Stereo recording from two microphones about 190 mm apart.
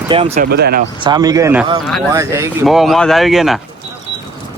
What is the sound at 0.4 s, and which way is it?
Speech, 55° right (ahead or behind).